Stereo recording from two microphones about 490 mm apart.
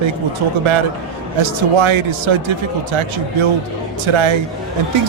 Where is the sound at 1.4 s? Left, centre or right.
Right.